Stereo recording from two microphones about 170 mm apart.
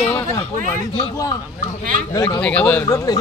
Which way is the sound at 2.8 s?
20° left (ahead or behind).